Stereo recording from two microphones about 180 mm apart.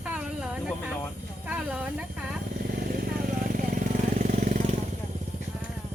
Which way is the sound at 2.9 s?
50° right (ahead or behind).